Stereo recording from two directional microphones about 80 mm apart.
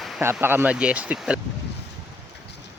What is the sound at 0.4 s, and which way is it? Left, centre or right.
Speech, right.